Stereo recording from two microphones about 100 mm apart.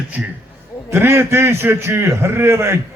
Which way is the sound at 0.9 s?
25° right (ahead or behind).